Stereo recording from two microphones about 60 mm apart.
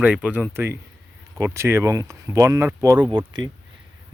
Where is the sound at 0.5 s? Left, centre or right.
Right.